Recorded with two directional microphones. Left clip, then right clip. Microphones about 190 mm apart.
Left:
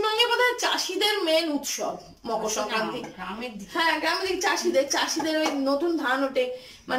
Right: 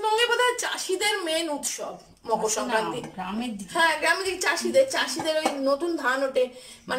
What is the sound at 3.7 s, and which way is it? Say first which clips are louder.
Speech: right 2 dB; centre (ahead or behind).